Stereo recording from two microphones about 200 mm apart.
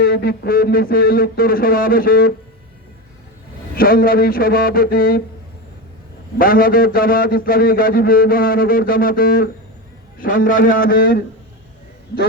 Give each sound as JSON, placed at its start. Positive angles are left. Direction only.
{"t": 0.0, "sound": "a man's voice", "side_deg": 50}
{"t": 3.8, "sound": "a man's voice", "side_deg": 45}
{"t": 6.4, "sound": "a man's voice", "side_deg": 45}